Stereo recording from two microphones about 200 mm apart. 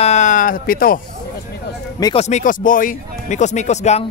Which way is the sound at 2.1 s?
35° left (ahead or behind).